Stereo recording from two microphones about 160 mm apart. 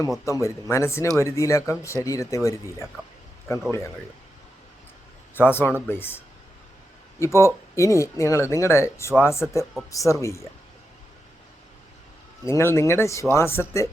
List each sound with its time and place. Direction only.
0.3 s speech: 20° left (ahead or behind)
5.4 s speech: 15° left (ahead or behind)
12.5 s speech: 15° left (ahead or behind)